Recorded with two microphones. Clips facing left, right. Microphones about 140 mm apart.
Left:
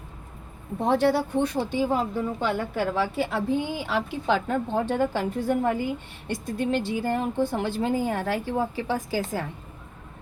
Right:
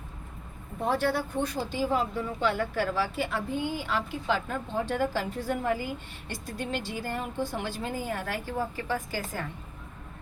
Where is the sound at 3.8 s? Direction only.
70° left (ahead or behind).